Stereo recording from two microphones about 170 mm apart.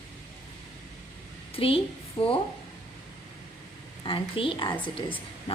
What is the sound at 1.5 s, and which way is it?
Speech, 35° left (ahead or behind).